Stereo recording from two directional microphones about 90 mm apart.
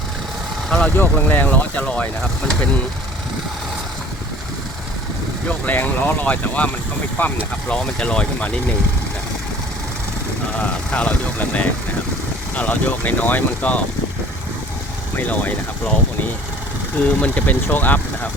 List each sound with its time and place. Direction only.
0.7 s speech: 15° left (ahead or behind)
5.5 s speech: 20° left (ahead or behind)
10.5 s speech: 15° left (ahead or behind)
15.1 s speech: 15° left (ahead or behind)
17.0 s speech: 15° left (ahead or behind)